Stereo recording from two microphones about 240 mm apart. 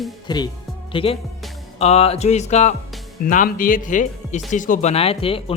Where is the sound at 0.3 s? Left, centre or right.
Centre.